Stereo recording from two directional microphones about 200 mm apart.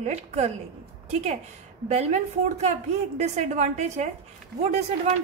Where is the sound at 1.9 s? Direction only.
35° right (ahead or behind).